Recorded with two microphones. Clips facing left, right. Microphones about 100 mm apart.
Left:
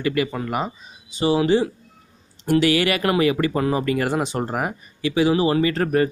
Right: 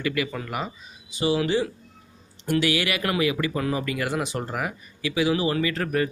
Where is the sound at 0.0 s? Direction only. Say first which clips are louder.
Left 5 dB; 35° left (ahead or behind).